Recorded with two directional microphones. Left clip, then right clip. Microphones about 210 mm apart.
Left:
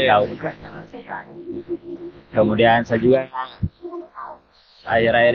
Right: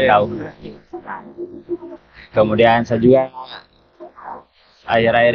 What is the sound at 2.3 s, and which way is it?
Speech, 30° right (ahead or behind).